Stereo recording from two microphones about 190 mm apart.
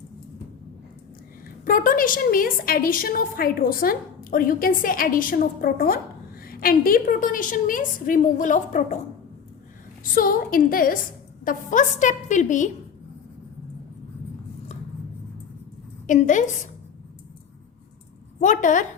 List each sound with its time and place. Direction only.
1.6 s a woman's voice: 45° left (ahead or behind)
10.0 s a woman's voice: 50° left (ahead or behind)
16.0 s a woman's voice: 40° left (ahead or behind)
18.3 s a woman's voice: 40° left (ahead or behind)